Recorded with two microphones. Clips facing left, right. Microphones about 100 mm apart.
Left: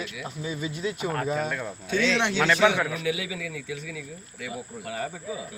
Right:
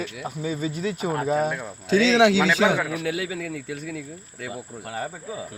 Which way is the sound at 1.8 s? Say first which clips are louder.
Right 8 dB; 90° right.